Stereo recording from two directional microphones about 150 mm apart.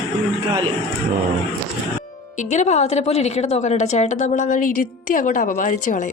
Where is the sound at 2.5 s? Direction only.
50° left (ahead or behind).